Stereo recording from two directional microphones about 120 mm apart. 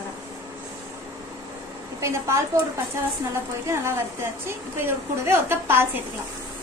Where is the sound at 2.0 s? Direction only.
25° right (ahead or behind).